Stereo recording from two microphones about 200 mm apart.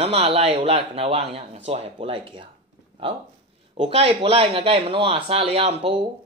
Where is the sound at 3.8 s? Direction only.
30° right (ahead or behind).